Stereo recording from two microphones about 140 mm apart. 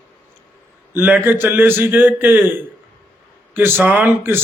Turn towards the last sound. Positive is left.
turn(degrees=-15)  # may be behind; listen again after turning